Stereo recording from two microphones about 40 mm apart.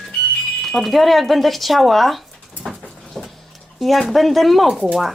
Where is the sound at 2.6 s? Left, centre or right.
Centre.